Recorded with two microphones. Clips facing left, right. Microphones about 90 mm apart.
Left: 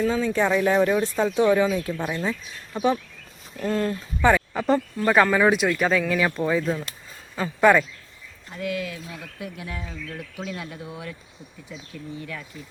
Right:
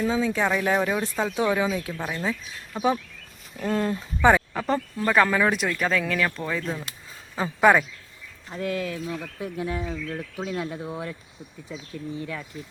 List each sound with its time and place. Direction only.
0.0 s speech: 5° right (ahead or behind)
4.5 s speech: centre (ahead or behind)
7.3 s speech: 10° right (ahead or behind)
8.5 s speech: 35° right (ahead or behind)
12.2 s speech: 25° right (ahead or behind)